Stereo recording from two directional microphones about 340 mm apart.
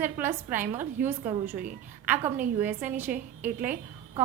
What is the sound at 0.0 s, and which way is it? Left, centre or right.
A woman's voice, centre.